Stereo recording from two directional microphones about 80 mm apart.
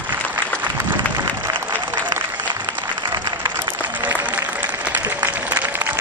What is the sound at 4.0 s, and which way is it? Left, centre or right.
Applause, right.